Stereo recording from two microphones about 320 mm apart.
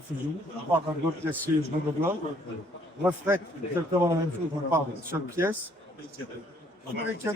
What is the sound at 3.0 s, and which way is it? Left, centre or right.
Speech, centre.